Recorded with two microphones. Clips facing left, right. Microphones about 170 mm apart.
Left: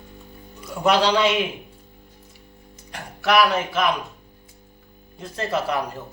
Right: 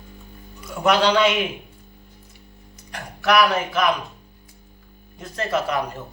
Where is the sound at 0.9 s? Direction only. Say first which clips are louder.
Right 1 dB; 30° left (ahead or behind).